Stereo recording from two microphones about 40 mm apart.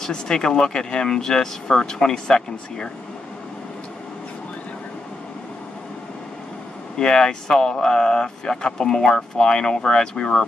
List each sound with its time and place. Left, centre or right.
0.0 s speech: centre
7.0 s speech: centre